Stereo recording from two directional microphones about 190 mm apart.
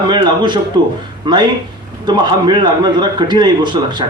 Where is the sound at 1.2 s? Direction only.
25° right (ahead or behind).